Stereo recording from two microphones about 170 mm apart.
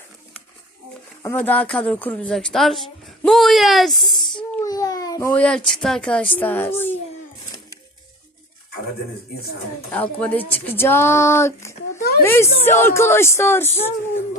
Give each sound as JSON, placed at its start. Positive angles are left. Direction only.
{"t": 1.2, "sound": "speech", "side_deg": 10}
{"t": 4.6, "sound": "babbling", "side_deg": 20}
{"t": 5.3, "sound": "speech", "side_deg": 5}
{"t": 9.9, "sound": "speech", "side_deg": 10}